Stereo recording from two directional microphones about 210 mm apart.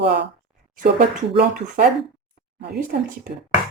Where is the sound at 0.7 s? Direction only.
40° right (ahead or behind).